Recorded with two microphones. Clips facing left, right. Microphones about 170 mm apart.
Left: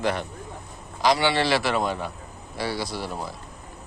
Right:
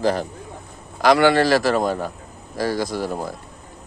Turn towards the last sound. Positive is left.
turn(degrees=-45)  # may be behind; listen again after turning